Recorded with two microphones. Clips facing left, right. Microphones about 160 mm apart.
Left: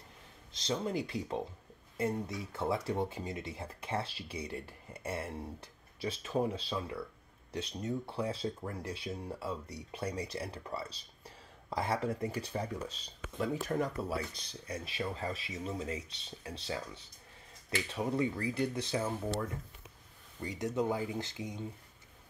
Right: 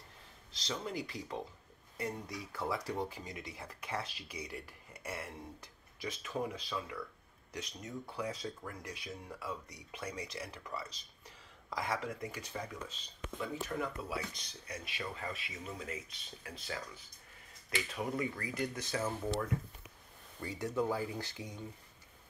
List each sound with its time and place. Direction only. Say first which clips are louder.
0.5 s speech: left 6 dB; 20° left (ahead or behind)
20.4 s speech: left 2 dB; 20° left (ahead or behind)